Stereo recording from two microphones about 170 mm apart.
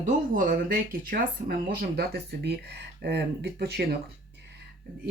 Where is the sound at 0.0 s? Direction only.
55° right (ahead or behind); by 3.8 s 70° right (ahead or behind).